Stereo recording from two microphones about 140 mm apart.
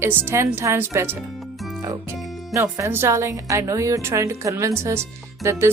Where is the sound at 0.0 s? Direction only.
15° right (ahead or behind).